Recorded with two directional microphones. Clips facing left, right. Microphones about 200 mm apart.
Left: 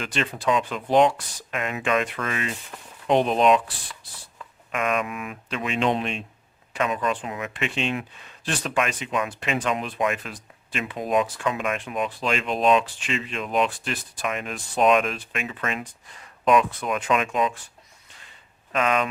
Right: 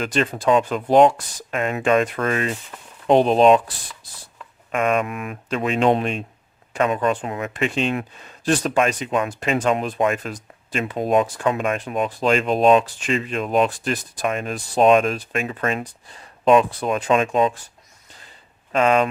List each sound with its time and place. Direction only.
0.0 s speech: 45° right (ahead or behind)
3.1 s speech: 35° right (ahead or behind)
4.7 s speech: 35° right (ahead or behind)
4.9 s speech: 50° right (ahead or behind); by 17.6 s 30° right (ahead or behind)
18.7 s speech: 30° right (ahead or behind)